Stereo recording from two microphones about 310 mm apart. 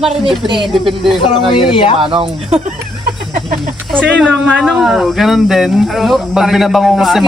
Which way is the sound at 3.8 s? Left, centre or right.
Centre.